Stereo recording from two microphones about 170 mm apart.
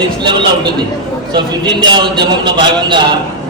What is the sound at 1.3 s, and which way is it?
A man's voice, 25° right (ahead or behind).